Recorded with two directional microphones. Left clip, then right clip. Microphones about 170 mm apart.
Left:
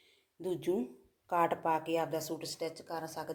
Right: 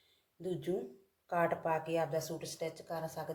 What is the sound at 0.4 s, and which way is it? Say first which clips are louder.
Speech: left 3 dB; 50° left (ahead or behind).